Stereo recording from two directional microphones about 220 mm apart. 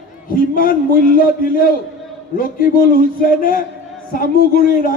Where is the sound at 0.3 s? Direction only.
40° left (ahead or behind).